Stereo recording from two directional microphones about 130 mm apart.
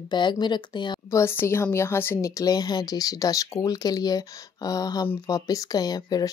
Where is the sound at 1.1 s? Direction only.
20° left (ahead or behind).